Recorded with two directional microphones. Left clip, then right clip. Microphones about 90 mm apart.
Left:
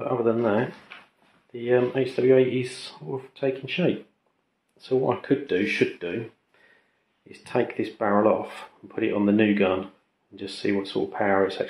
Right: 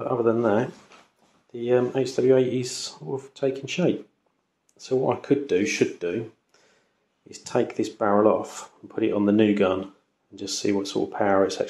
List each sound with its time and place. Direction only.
0.0 s a sound: 20° right (ahead or behind)
0.4 s speech: 10° right (ahead or behind)
2.3 s speech: 25° right (ahead or behind)
7.2 s speech: 25° right (ahead or behind)